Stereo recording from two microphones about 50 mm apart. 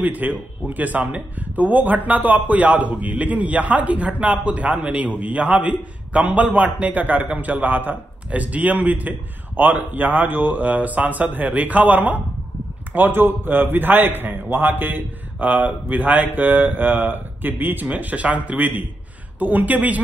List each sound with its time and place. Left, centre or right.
0.0 s a man's voice: right
12.9 s a man's voice: right